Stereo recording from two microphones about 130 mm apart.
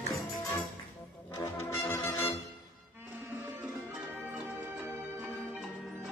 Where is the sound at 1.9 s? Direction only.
15° left (ahead or behind).